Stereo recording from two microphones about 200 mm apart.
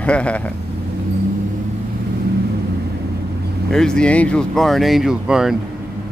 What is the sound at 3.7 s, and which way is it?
Speech, 5° left (ahead or behind).